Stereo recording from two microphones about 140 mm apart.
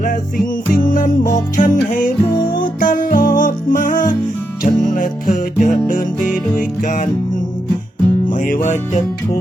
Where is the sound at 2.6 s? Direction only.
75° left (ahead or behind).